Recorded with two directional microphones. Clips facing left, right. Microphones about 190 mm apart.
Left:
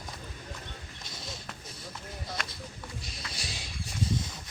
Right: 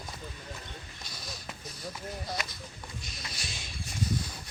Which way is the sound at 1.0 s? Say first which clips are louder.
Left 3 dB; 25° left (ahead or behind).